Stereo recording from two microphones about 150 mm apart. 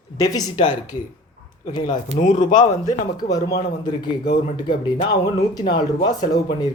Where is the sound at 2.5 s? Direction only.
25° left (ahead or behind).